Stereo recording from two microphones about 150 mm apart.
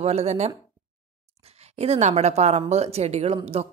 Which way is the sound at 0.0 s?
45° right (ahead or behind).